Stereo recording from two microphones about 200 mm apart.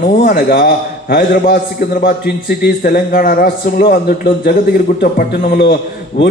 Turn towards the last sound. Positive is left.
turn(degrees=50)  # may be behind; listen again after turning